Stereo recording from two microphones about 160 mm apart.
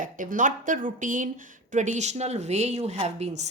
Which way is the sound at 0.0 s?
55° right (ahead or behind).